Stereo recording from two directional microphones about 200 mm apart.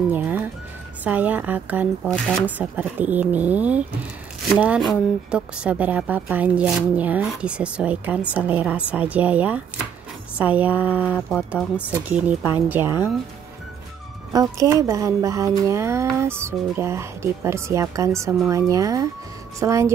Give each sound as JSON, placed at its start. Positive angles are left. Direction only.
{"t": 0.1, "sound": "music", "side_deg": -10}
{"t": 1.0, "sound": "speech", "side_deg": -10}
{"t": 11.2, "sound": "speech", "side_deg": 5}
{"t": 11.9, "sound": "speech", "side_deg": -5}
{"t": 14.3, "sound": "speech", "side_deg": -15}